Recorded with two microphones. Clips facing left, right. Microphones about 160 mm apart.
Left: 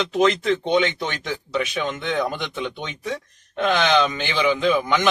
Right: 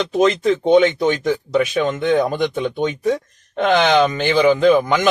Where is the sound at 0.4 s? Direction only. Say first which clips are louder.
Right 7 dB; 45° right (ahead or behind).